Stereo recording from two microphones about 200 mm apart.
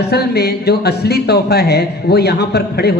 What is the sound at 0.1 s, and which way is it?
A man's voice, 55° left (ahead or behind).